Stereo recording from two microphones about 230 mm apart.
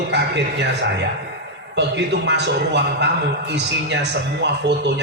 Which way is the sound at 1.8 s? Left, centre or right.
Right.